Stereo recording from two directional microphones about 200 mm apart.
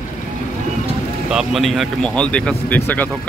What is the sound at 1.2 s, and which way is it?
Speech, centre (ahead or behind).